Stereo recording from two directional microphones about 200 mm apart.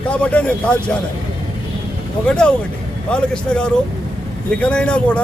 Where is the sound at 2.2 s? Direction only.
5° left (ahead or behind).